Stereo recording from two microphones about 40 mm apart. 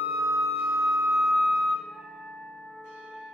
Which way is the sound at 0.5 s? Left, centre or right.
Right.